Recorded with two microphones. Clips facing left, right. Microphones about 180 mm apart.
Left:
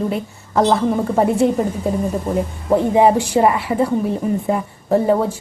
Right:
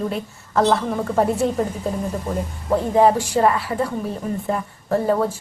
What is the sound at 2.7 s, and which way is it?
A woman's voice, 15° left (ahead or behind).